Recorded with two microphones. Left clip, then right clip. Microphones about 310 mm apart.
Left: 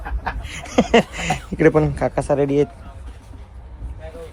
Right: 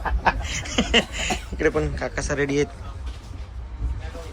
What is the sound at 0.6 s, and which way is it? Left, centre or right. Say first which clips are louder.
A man's voice: left 5 dB; centre.